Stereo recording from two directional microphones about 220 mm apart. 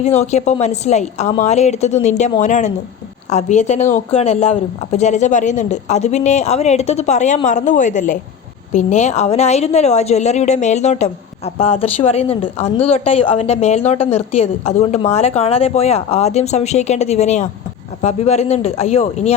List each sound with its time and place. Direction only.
0.0 s a woman's voice: 30° left (ahead or behind)